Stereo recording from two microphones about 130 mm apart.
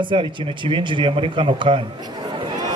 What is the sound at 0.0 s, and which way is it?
Speech, 40° right (ahead or behind).